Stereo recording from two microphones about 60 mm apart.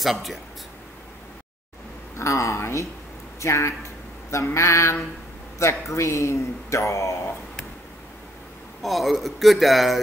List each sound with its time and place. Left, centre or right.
0.0 s speech: centre
2.1 s speech: left
4.3 s a sound: left
5.6 s speech: left
8.8 s speech: centre